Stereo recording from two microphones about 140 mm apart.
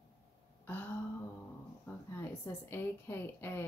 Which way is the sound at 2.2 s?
15° left (ahead or behind).